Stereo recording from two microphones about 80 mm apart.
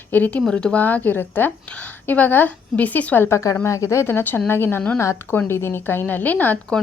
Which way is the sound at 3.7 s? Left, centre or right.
Left.